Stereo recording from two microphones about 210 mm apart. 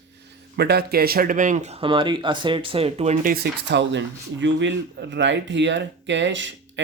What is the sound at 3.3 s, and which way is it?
Speech, 50° right (ahead or behind).